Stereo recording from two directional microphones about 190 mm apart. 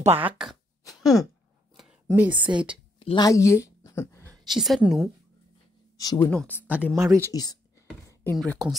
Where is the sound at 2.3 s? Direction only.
25° right (ahead or behind).